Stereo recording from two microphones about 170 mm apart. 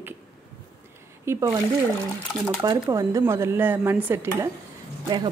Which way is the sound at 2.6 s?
20° right (ahead or behind).